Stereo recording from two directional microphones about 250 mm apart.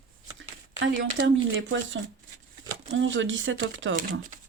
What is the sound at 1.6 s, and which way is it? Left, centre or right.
Speech, right.